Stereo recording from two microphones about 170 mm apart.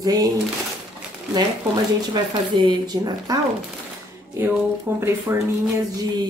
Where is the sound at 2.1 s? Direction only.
25° right (ahead or behind).